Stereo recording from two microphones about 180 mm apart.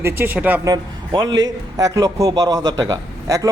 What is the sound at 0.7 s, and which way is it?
A man's voice, 20° right (ahead or behind).